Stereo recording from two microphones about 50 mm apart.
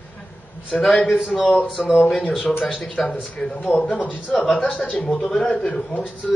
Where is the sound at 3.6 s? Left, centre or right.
Left.